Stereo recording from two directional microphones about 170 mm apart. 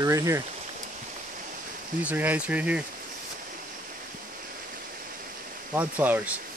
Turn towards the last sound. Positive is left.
turn(degrees=-10)  # may be behind; listen again after turning